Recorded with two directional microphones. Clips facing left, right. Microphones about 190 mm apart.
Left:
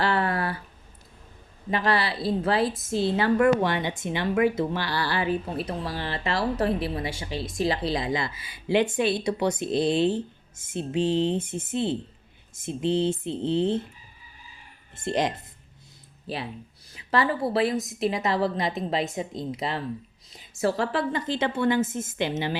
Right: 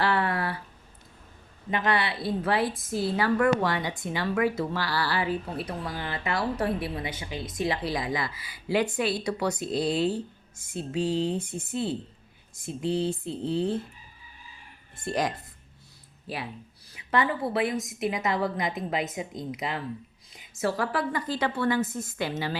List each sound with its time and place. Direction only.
0.0 s a sound: 25° left (ahead or behind)
1.7 s a woman's voice: 20° right (ahead or behind)
2.2 s a woman's voice: 25° left (ahead or behind)
15.0 s a woman's voice: 20° left (ahead or behind)
17.5 s a woman's voice: 30° left (ahead or behind)